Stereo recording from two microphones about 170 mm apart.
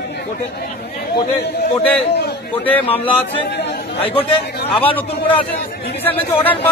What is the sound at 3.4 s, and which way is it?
Chatter, 75° left (ahead or behind).